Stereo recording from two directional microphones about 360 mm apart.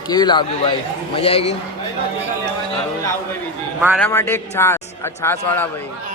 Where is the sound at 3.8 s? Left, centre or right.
Centre.